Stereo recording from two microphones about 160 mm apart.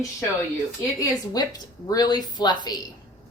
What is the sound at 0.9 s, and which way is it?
A woman's voice, 25° left (ahead or behind).